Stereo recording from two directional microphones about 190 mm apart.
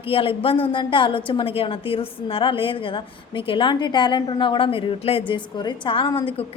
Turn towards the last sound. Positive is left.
turn(degrees=30)  # may be behind; listen again after turning